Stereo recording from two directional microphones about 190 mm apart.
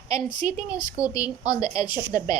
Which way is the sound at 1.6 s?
20° left (ahead or behind).